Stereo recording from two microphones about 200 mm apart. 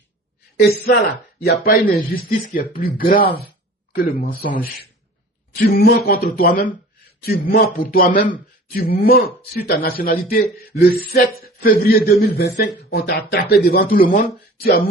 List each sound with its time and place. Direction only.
1.5 s speech: 50° left (ahead or behind)
5.5 s speech: 50° left (ahead or behind)